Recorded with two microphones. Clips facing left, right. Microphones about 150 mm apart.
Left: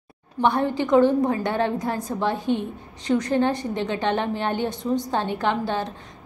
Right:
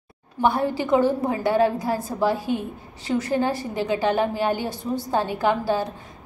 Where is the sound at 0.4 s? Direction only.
5° right (ahead or behind).